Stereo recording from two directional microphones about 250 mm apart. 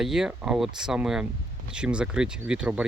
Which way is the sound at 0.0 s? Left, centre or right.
Centre.